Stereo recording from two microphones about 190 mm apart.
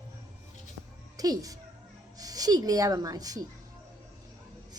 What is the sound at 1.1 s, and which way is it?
A child's voice, 20° right (ahead or behind).